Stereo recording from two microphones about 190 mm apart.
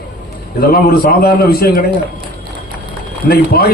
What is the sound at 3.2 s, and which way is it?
Speech, 55° left (ahead or behind).